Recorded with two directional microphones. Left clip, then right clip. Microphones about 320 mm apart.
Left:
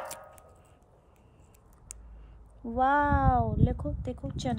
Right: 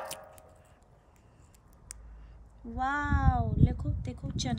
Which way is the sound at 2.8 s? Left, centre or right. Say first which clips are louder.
Left 7 dB; centre.